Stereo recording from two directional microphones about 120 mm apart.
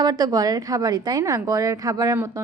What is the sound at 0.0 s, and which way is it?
A woman's voice, 30° right (ahead or behind).